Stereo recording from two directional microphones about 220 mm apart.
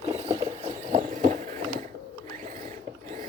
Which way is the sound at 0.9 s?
35° right (ahead or behind).